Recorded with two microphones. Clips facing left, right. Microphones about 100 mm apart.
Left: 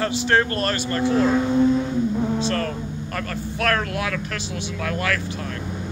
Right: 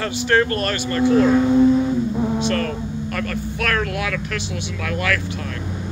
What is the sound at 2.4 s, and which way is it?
Speech, 30° left (ahead or behind).